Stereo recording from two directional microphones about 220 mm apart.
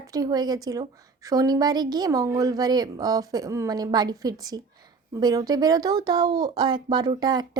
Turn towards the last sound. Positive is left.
turn(degrees=-20)  # may be behind; listen again after turning